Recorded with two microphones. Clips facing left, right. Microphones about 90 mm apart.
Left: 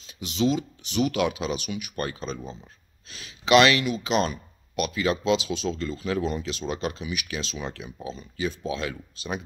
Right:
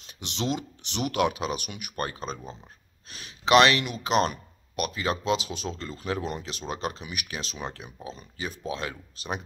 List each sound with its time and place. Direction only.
0.0 s speech: 60° right (ahead or behind)
3.1 s a sound: 45° right (ahead or behind)
4.0 s speech: 55° right (ahead or behind)